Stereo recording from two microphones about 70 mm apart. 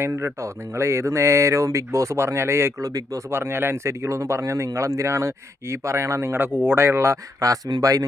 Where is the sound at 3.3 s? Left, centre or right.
Right.